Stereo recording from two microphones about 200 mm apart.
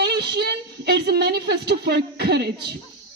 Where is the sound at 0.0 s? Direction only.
55° right (ahead or behind).